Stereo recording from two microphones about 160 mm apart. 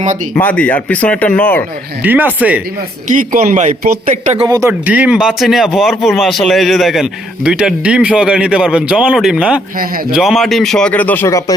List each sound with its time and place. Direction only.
0.3 s speech: 10° left (ahead or behind)
2.0 s speech: 10° right (ahead or behind)
3.1 s speech: 55° right (ahead or behind)
4.4 s speech: 20° right (ahead or behind)
4.9 s a man's voice: 10° right (ahead or behind)
9.7 s a man's voice: 65° right (ahead or behind)
10.1 s a man's voice: centre (ahead or behind); by 11.5 s 20° left (ahead or behind)